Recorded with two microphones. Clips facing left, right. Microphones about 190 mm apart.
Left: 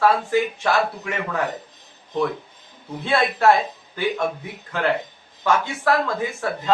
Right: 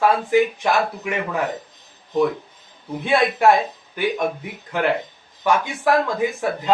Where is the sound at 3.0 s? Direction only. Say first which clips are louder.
Right 2 dB; 15° right (ahead or behind).